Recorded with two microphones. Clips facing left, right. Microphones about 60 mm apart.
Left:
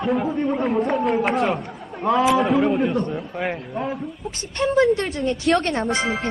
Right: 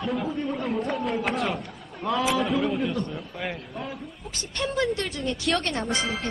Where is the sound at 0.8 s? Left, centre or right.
Left.